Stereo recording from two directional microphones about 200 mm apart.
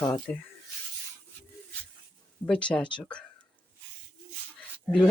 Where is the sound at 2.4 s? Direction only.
5° left (ahead or behind).